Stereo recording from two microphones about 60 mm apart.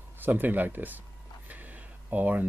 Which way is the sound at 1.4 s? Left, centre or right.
Right.